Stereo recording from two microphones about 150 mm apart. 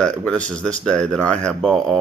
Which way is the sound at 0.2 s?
5° left (ahead or behind).